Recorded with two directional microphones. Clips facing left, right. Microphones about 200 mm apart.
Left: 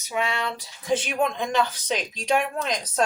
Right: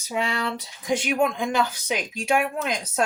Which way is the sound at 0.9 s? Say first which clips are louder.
Right 1 dB; 10° right (ahead or behind).